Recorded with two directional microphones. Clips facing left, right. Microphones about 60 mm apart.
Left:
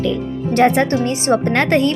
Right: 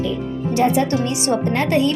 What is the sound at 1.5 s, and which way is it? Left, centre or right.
Speech, left.